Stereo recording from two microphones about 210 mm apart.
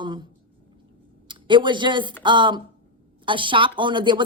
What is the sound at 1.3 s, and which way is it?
A woman's voice, 20° right (ahead or behind).